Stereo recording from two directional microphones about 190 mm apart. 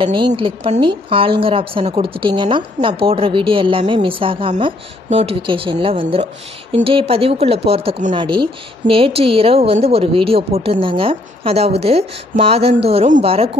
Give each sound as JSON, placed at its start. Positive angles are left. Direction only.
{"t": 0.0, "sound": "speech", "side_deg": -25}